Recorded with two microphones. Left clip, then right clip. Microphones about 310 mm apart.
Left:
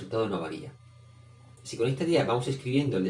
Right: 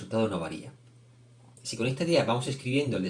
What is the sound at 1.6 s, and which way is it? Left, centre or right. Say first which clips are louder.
Speech: left 1 dB; right.